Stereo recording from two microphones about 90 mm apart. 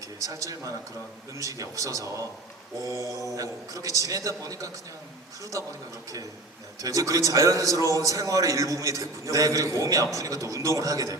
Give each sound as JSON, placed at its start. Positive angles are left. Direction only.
{"t": 0.2, "sound": "a man's voice", "side_deg": -40}
{"t": 6.8, "sound": "a man's voice", "side_deg": -40}